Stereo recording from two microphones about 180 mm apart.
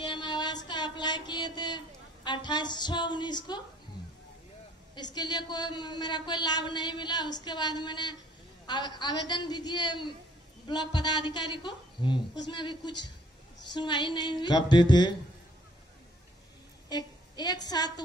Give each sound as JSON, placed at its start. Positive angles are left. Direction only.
{"t": 0.0, "sound": "a sound", "side_deg": 25}
{"t": 2.2, "sound": "speech", "side_deg": 25}
{"t": 4.9, "sound": "speech", "side_deg": 25}
{"t": 16.9, "sound": "a woman's voice", "side_deg": 25}